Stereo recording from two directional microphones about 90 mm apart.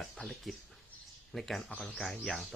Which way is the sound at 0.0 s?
Centre (ahead or behind).